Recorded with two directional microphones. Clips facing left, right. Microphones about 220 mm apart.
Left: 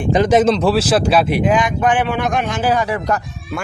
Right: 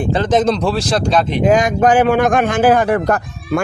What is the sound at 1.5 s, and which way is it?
Speech, 45° right (ahead or behind).